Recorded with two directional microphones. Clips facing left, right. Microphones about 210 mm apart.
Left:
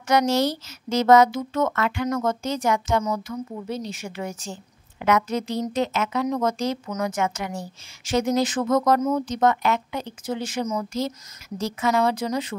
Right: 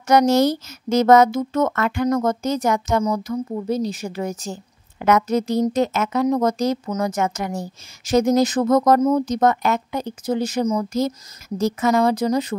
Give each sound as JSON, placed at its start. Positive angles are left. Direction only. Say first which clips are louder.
{"t": 0.0, "sound": "speech", "louder": "right 5 dB", "side_deg": -45}